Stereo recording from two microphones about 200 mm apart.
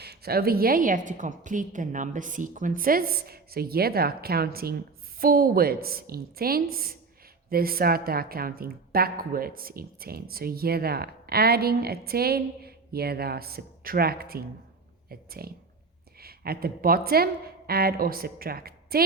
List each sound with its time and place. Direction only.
0.0 s a woman's voice: 50° right (ahead or behind)